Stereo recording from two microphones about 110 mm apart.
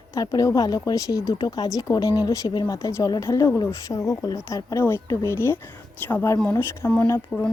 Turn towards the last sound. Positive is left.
turn(degrees=15)  # may be behind; listen again after turning